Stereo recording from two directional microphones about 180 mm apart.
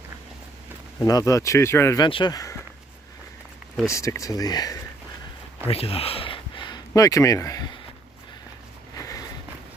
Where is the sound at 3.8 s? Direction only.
15° left (ahead or behind).